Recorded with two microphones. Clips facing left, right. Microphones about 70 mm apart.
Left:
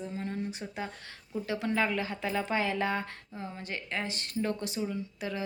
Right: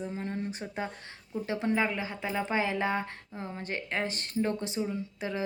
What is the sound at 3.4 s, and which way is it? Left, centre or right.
A woman's voice, right.